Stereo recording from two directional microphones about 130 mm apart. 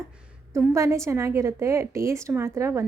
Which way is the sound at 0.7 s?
20° right (ahead or behind).